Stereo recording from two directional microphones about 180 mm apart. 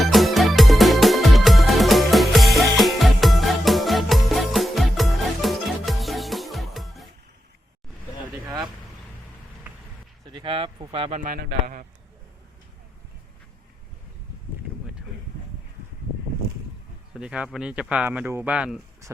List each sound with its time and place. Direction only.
0.0 s music: centre (ahead or behind)
10.3 s a sound: 30° right (ahead or behind)
11.6 s a man's voice: 50° right (ahead or behind)
17.2 s speech: 5° right (ahead or behind)